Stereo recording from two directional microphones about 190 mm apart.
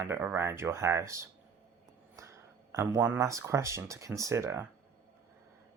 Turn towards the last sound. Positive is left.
turn(degrees=-15)  # may be behind; listen again after turning